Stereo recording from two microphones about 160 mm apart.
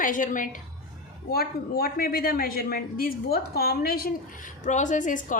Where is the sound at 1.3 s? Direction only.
75° left (ahead or behind).